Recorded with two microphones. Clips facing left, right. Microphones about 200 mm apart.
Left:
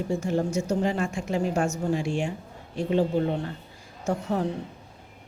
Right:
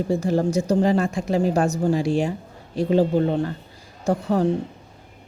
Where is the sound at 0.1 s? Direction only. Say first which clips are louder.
Right 5 dB; 35° right (ahead or behind).